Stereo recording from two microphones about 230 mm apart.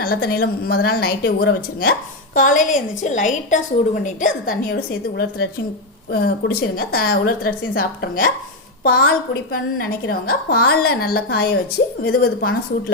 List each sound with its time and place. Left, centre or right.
0.0 s a woman's voice: left
4.4 s a woman's voice: left